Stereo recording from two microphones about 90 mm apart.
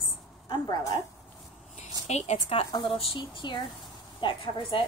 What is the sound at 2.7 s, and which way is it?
Speech, 55° left (ahead or behind).